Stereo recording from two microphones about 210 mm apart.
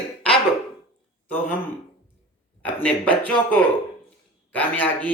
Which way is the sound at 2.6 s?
5° left (ahead or behind).